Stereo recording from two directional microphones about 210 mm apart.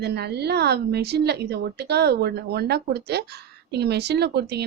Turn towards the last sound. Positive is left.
turn(degrees=-50)  # may be behind; listen again after turning